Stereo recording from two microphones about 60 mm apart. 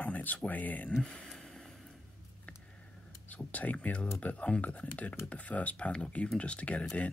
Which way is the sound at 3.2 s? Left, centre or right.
Left.